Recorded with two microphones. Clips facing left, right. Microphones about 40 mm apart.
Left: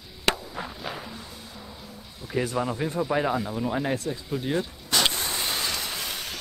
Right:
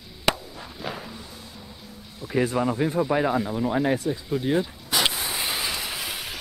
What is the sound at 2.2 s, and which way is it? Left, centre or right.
Speech, centre.